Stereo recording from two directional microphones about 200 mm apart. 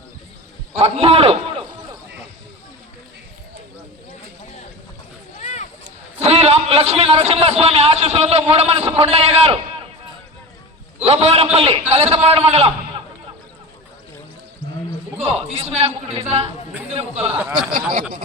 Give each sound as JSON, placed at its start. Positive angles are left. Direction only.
{"t": 0.7, "sound": "a man's voice", "side_deg": -30}
{"t": 5.4, "sound": "a sound", "side_deg": 35}
{"t": 6.1, "sound": "a man's voice", "side_deg": -30}
{"t": 11.0, "sound": "a man's voice", "side_deg": -30}
{"t": 14.6, "sound": "a sound", "side_deg": -60}
{"t": 15.2, "sound": "a man's voice", "side_deg": -30}
{"t": 17.3, "sound": "speech", "side_deg": -10}
{"t": 17.7, "sound": "speech", "side_deg": -45}